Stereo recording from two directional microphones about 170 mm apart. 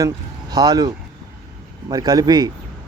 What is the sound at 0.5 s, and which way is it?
Speech, 25° right (ahead or behind).